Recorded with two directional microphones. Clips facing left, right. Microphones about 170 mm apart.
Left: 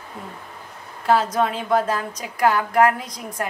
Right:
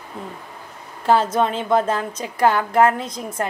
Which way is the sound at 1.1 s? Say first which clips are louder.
Right 2 dB; 25° right (ahead or behind).